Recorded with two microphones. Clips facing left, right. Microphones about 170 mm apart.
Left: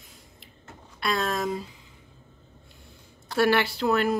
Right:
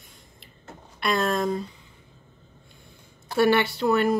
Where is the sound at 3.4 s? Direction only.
Centre (ahead or behind).